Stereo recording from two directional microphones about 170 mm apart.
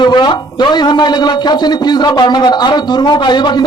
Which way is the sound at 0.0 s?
25° left (ahead or behind).